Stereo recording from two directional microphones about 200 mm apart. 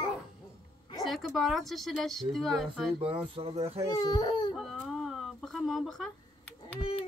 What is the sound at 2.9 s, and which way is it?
Speech, 25° right (ahead or behind).